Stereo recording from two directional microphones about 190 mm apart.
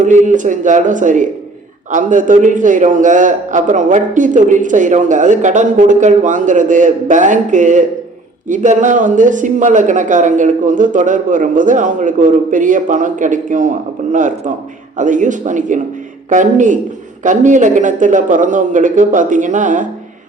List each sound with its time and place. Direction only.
0.0 s a man's voice: 40° right (ahead or behind)